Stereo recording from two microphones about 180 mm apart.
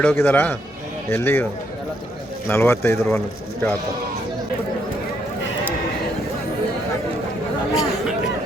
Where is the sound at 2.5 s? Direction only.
15° left (ahead or behind).